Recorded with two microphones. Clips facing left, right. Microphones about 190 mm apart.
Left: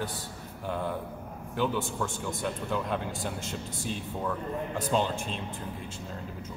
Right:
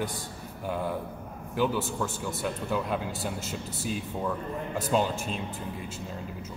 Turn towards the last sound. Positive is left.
turn(degrees=-5)  # may be behind; listen again after turning